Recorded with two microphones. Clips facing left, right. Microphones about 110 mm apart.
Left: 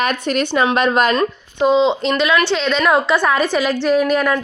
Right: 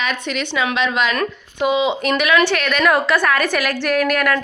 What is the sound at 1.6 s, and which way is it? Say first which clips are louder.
Speech: left 3 dB; 10° right (ahead or behind).